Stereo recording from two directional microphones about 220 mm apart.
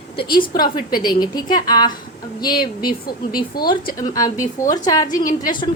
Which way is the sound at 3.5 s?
45° left (ahead or behind).